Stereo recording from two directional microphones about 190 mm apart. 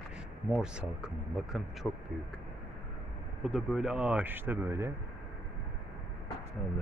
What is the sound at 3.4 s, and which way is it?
Speech, 5° right (ahead or behind).